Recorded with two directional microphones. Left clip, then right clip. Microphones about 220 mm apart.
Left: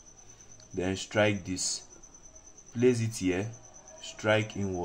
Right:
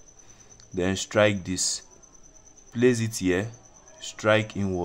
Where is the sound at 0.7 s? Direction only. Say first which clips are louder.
Right 5 dB; 35° right (ahead or behind).